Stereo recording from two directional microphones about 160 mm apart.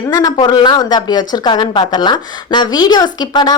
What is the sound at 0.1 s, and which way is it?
Speech, 25° left (ahead or behind).